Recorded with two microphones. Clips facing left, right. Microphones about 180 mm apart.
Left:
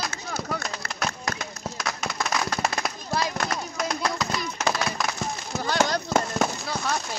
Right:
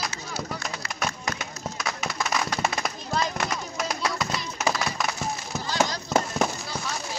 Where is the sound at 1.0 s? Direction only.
5° right (ahead or behind).